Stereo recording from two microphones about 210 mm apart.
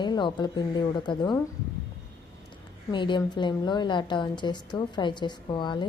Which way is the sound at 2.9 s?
20° left (ahead or behind).